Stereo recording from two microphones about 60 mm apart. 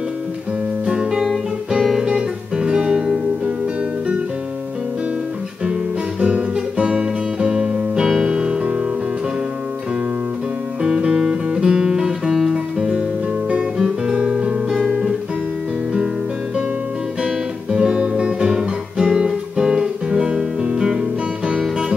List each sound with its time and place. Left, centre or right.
0.8 s guitar: centre
1.7 s music: centre
5.7 s guitar: centre
6.5 s music: centre
10.8 s music: centre
13.7 s guitar: centre
17.2 s guitar: centre
21.5 s music: centre